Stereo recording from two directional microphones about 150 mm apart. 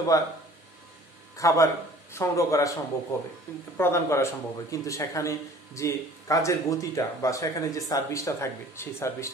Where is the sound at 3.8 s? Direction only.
15° left (ahead or behind).